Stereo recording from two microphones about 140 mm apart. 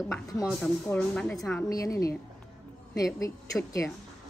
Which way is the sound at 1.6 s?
25° left (ahead or behind).